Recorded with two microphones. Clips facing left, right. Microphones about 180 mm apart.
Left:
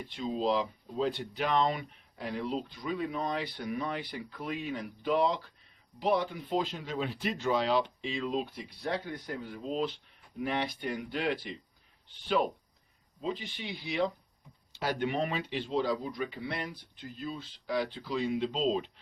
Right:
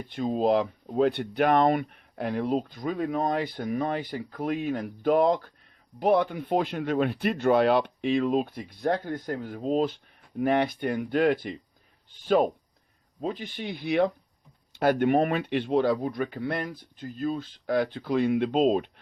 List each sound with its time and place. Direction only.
0.1 s speech: 50° right (ahead or behind)
13.2 s speech: 50° right (ahead or behind)